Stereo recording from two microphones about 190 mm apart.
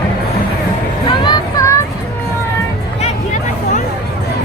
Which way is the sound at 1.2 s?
20° left (ahead or behind).